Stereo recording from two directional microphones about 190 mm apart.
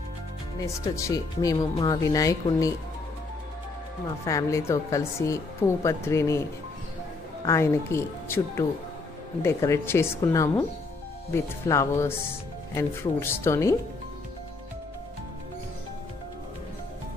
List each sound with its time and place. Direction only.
0.9 s speech: 15° left (ahead or behind)
4.3 s speech: 15° left (ahead or behind)
7.4 s speech: 15° left (ahead or behind)